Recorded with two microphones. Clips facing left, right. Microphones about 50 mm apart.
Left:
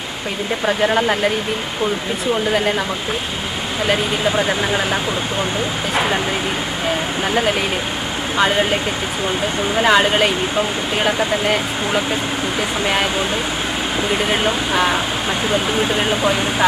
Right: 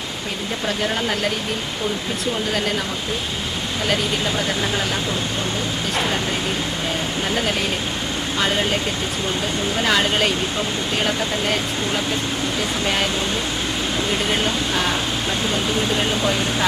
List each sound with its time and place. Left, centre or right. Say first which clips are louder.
0.6 s speech: left 7 dB; left
2.5 s speech: left 5 dB; centre
3.8 s speech: left 4 dB; centre
8.4 s speech: left 5 dB; centre
12.8 s speech: left 4 dB; centre
14.1 s speech: left 4 dB; centre